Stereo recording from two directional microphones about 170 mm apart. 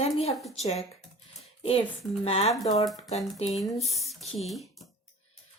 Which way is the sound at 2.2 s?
35° left (ahead or behind).